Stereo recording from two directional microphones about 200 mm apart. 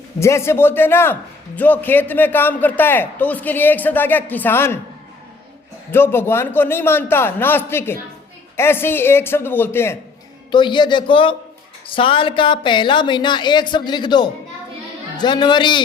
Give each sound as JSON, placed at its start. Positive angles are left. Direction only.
{"t": 0.2, "sound": "a man's voice", "side_deg": 15}
{"t": 5.9, "sound": "a man's voice", "side_deg": 10}
{"t": 10.5, "sound": "speech", "side_deg": 20}